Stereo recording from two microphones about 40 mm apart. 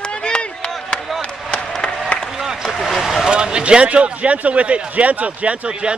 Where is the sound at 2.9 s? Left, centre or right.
Centre.